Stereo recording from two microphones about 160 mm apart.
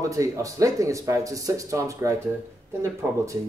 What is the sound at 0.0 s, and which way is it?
Speech, 20° right (ahead or behind).